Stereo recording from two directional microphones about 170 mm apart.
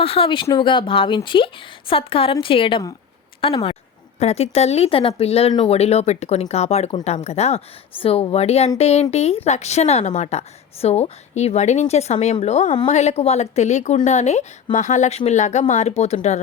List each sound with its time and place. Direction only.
0.0 s a woman's voice: 35° left (ahead or behind)